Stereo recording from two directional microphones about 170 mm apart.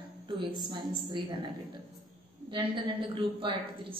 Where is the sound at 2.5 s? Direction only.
30° right (ahead or behind).